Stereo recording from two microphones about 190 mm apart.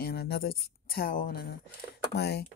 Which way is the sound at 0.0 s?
55° left (ahead or behind).